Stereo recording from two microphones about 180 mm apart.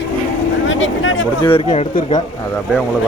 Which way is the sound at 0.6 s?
90° left.